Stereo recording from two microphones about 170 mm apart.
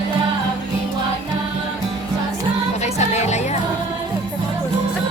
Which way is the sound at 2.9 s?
40° left (ahead or behind).